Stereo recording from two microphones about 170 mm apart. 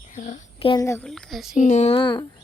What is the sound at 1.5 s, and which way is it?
Speech, 45° left (ahead or behind).